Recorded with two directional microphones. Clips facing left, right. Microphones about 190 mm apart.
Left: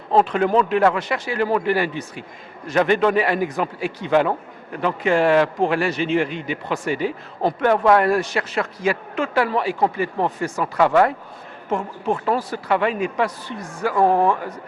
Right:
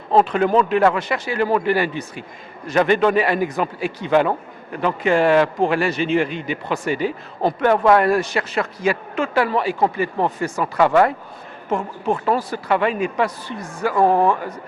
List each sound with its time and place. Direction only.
0.1 s a man's voice: 10° right (ahead or behind)
12.1 s a man's voice: 20° right (ahead or behind)